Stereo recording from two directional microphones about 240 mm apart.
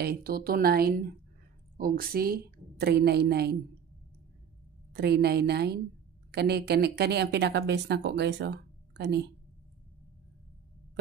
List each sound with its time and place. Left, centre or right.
0.0 s a woman's voice: right
4.9 s speech: right